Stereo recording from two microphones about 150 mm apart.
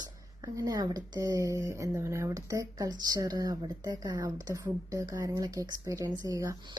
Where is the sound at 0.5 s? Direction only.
25° right (ahead or behind).